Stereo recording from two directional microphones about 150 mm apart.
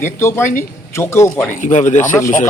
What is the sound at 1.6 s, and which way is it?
Speech, 55° left (ahead or behind).